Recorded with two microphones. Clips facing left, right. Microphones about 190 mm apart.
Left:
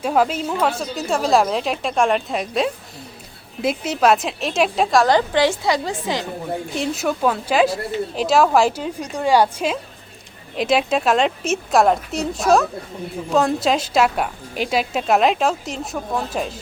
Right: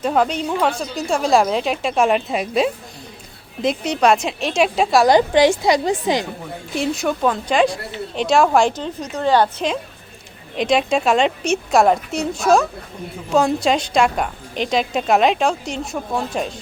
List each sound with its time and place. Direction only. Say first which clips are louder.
0.0 s a woman's voice: even; 5° left (ahead or behind); by 6.2 s 15° right (ahead or behind)
6.7 s a woman's voice: right 3 dB; 5° left (ahead or behind)